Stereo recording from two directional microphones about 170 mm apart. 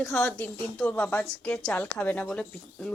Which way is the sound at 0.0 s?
5° left (ahead or behind).